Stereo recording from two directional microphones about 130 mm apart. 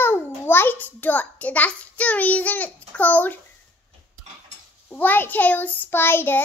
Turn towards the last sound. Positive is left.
turn(degrees=15)  # may be behind; listen again after turning